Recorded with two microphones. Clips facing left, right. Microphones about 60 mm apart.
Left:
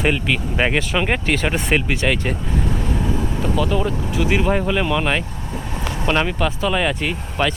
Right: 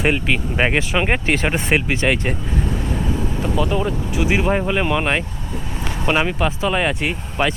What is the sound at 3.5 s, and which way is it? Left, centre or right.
Speech, centre.